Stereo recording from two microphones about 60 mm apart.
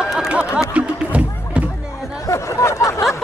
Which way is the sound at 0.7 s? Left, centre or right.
Right.